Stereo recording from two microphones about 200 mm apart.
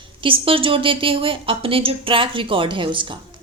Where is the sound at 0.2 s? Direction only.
25° right (ahead or behind).